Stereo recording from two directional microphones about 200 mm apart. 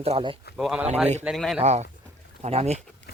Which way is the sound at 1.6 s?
35° right (ahead or behind).